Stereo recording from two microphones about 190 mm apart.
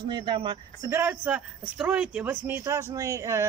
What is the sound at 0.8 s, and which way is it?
Speech, 10° right (ahead or behind).